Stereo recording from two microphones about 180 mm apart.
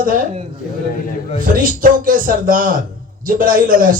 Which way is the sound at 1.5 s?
50° right (ahead or behind).